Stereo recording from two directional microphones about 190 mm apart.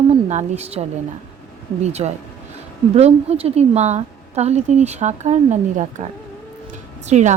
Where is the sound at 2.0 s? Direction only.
30° right (ahead or behind).